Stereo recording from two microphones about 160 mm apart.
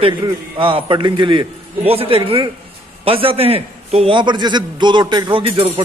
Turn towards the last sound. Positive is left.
turn(degrees=-35)  # may be behind; listen again after turning